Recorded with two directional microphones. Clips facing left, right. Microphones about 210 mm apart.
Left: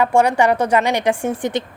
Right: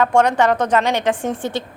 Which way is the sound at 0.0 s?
10° left (ahead or behind).